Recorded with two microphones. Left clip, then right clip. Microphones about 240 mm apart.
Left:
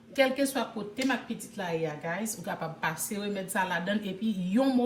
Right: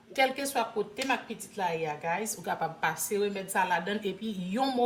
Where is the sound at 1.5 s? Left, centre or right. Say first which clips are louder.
Right 2 dB; right.